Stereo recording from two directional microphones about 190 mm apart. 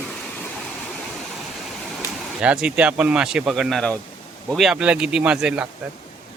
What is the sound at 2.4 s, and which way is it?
Speech, 5° right (ahead or behind).